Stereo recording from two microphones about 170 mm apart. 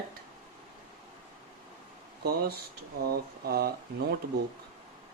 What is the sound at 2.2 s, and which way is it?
Speech, 70° right (ahead or behind).